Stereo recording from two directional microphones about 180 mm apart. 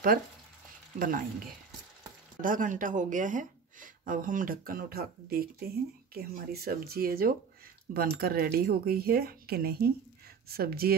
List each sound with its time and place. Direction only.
0.9 s speech: 50° right (ahead or behind)
2.4 s speech: 45° right (ahead or behind)